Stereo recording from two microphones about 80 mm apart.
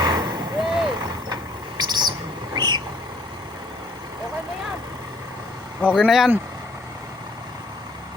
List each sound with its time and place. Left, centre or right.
0.0 s vehicle: right
0.6 s vehicle: centre
1.8 s bird: right
2.6 s vehicle: right
6.0 s speech: centre